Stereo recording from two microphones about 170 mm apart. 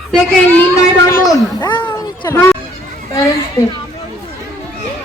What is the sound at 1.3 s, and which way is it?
A child's voice, 25° left (ahead or behind).